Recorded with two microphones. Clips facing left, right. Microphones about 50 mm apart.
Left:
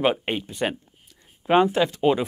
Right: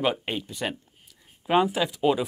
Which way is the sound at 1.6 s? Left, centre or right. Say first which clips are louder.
Left 5 dB; centre.